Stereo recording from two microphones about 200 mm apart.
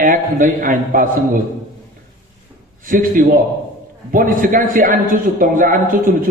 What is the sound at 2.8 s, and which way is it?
A man's voice, 45° right (ahead or behind).